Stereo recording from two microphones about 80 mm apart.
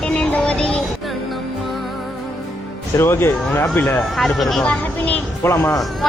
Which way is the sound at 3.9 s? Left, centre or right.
Centre.